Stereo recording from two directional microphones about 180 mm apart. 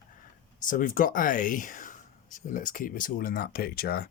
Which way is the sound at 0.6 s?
45° left (ahead or behind).